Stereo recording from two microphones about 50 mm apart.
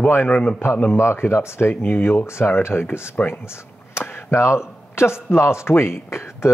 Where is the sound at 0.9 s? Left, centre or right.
Left.